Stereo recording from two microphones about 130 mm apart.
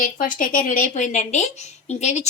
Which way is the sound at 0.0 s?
90° left.